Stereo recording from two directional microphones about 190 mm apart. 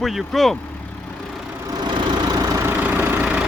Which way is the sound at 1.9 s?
25° right (ahead or behind).